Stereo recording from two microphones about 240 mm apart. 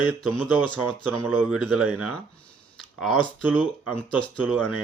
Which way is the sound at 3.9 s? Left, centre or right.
Centre.